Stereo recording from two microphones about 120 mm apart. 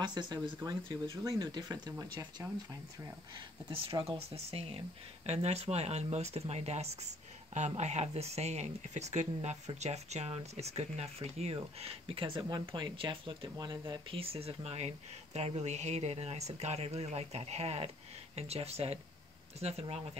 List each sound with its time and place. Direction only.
0.0 s speech: 35° right (ahead or behind)
3.3 s speech: 45° right (ahead or behind)
4.0 s speech: 55° right (ahead or behind)
12.4 s speech: 35° right (ahead or behind)
13.6 s speech: 35° right (ahead or behind)
14.1 s speech: 50° right (ahead or behind)